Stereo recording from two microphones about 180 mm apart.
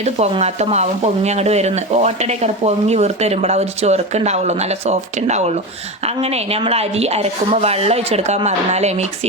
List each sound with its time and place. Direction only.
0.0 s speech: 35° right (ahead or behind)